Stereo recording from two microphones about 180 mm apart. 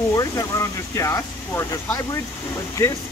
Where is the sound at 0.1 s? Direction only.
15° left (ahead or behind).